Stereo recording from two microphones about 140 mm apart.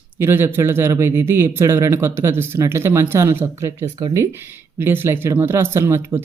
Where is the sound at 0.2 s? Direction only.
15° right (ahead or behind).